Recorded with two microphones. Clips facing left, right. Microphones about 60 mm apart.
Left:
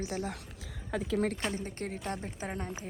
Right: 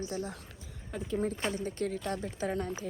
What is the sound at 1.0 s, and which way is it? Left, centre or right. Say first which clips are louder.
Speech: left 2 dB; left.